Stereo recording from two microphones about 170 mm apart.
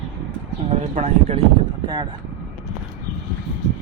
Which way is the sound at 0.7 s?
40° right (ahead or behind).